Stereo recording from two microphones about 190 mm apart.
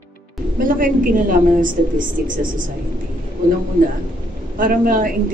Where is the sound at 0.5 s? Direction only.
45° right (ahead or behind).